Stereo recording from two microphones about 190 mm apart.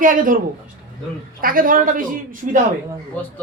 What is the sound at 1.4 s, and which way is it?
Speech, 50° right (ahead or behind).